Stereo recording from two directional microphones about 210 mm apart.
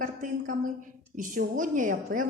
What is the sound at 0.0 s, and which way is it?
A woman's voice, 40° right (ahead or behind).